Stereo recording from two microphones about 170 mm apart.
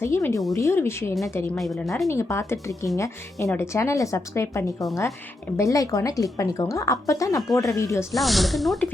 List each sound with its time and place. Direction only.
0.0 s speech: 15° left (ahead or behind)
1.5 s speech: centre (ahead or behind)
2.0 s speech: 15° left (ahead or behind)
8.1 s speech: centre (ahead or behind)